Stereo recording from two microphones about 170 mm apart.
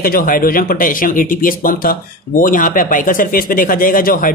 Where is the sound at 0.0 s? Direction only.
55° left (ahead or behind).